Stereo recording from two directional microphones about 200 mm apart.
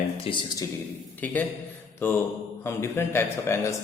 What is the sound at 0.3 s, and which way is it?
Speech, 30° left (ahead or behind).